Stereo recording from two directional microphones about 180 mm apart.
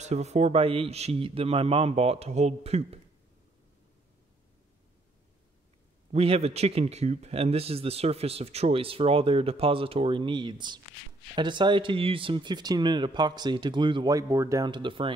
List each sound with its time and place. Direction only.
0.0 s speech: 40° right (ahead or behind)
6.1 s speech: 35° right (ahead or behind)